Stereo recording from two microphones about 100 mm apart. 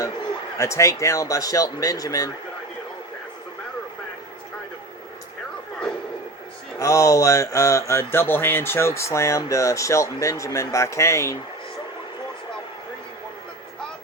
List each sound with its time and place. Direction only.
0.6 s mantra: 30° left (ahead or behind)
6.7 s mantra: 30° left (ahead or behind)